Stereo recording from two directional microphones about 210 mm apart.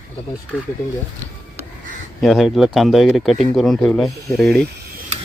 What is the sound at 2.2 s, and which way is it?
Speech, centre (ahead or behind).